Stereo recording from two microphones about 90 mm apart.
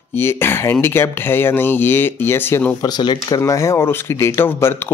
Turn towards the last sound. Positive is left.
turn(degrees=25)  # may be behind; listen again after turning